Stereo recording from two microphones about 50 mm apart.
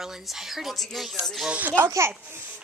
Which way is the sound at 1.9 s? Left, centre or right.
Right.